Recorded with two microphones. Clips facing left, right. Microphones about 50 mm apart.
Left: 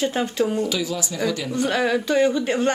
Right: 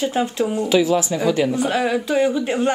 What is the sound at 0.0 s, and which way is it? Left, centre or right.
Speech, centre.